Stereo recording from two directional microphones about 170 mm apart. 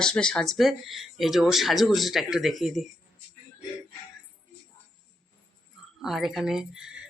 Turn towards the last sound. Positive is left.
turn(degrees=-5)  # may be behind; listen again after turning